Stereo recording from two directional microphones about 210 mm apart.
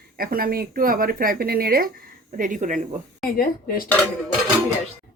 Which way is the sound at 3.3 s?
45° left (ahead or behind).